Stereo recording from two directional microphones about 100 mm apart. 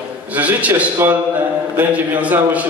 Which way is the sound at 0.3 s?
15° right (ahead or behind).